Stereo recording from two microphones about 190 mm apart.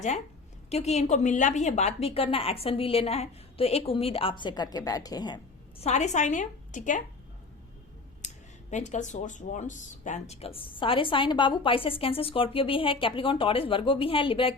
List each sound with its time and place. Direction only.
0.7 s a woman's voice: 35° left (ahead or behind)
5.8 s a woman's voice: 35° left (ahead or behind)
8.7 s speech: 40° left (ahead or behind)